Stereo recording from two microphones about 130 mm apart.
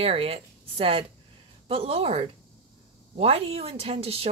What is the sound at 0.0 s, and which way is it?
Speech, 50° right (ahead or behind).